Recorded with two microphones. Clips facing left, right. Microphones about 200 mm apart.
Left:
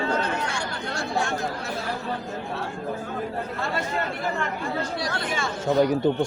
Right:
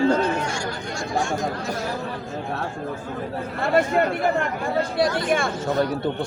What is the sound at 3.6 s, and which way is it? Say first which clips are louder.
Speech: right 11 dB; 55° right (ahead or behind).